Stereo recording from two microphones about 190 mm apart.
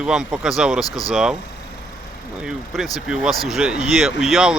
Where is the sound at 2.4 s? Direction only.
Centre (ahead or behind).